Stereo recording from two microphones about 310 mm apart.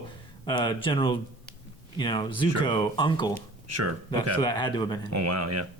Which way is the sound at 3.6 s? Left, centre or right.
Right.